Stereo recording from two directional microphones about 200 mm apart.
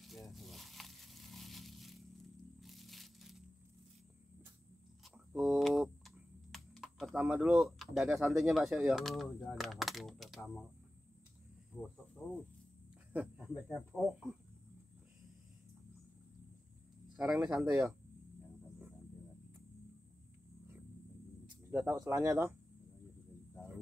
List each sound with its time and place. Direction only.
0.0 s a sound: centre (ahead or behind)
2.6 s crushing: centre (ahead or behind)
5.0 s typing: centre (ahead or behind)
11.7 s speech: 10° left (ahead or behind)
17.3 s speech: 5° right (ahead or behind)
21.6 s speech: 15° right (ahead or behind)